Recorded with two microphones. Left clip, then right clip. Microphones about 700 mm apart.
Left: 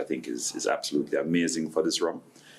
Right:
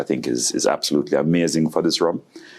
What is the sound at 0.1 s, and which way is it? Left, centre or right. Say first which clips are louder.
Speech: right 10 dB; right.